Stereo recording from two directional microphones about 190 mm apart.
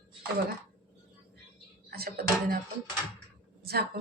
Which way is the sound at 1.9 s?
55° right (ahead or behind).